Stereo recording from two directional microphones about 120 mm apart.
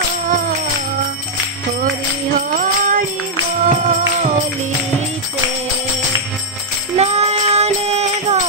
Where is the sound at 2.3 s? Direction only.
90° right.